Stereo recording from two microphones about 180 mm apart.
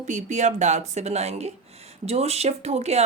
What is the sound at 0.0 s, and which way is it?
Speech, 40° right (ahead or behind).